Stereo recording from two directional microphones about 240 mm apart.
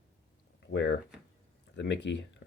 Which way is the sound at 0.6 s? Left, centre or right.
Left.